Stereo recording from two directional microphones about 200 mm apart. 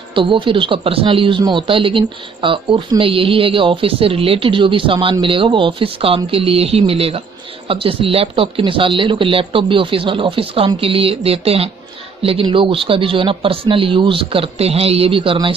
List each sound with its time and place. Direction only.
0.1 s speech: 25° right (ahead or behind)